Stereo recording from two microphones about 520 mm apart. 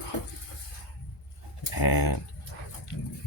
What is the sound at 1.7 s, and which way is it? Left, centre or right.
Speech, left.